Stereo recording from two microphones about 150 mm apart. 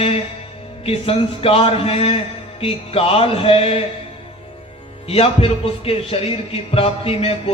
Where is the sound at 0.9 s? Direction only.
40° left (ahead or behind).